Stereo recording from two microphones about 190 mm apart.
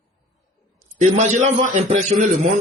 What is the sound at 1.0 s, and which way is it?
A man's voice, 40° right (ahead or behind).